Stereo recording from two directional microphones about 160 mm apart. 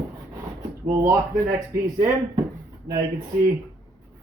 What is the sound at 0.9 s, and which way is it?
Speech, 20° right (ahead or behind).